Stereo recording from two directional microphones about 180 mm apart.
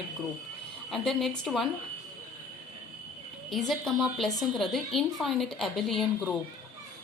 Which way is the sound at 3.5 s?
Centre (ahead or behind).